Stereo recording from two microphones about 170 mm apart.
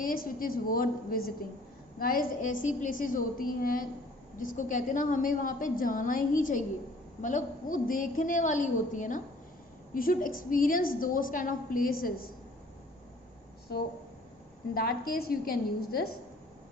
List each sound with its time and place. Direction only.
0.0 s a woman's voice: 55° left (ahead or behind)
14.7 s a woman's voice: 60° left (ahead or behind)